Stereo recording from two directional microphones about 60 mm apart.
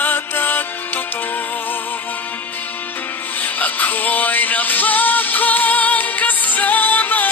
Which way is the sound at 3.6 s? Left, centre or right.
Left.